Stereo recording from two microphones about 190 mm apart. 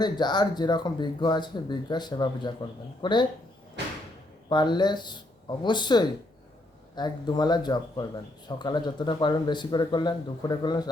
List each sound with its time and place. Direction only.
0.0 s speech: 20° left (ahead or behind)
4.4 s speech: 25° left (ahead or behind)